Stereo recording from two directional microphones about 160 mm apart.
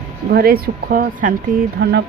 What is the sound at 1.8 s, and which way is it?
Speech, 90° right.